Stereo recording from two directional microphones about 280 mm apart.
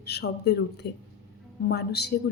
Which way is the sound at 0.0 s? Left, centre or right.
Left.